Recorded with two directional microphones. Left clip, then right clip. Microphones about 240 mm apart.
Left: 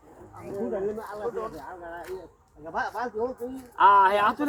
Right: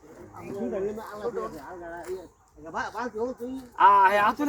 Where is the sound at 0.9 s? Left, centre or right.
Right.